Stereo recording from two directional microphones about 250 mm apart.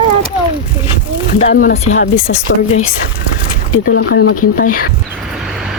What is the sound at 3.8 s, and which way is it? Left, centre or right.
Speech, left.